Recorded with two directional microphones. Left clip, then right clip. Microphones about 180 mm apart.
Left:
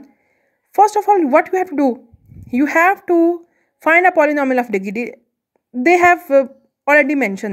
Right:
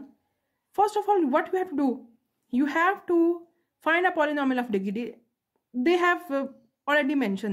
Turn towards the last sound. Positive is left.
turn(degrees=40)  # may be behind; listen again after turning